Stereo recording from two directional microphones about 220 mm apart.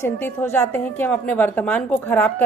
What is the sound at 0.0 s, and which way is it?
A woman's voice, 10° left (ahead or behind).